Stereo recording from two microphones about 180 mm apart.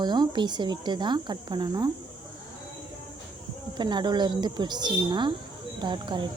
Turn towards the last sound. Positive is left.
turn(degrees=-25)  # may be behind; listen again after turning